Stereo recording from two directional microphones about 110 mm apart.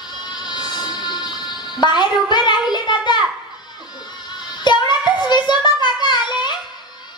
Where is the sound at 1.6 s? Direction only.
40° left (ahead or behind).